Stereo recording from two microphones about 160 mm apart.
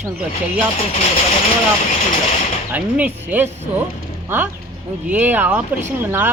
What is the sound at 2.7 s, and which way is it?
Speech, 10° right (ahead or behind).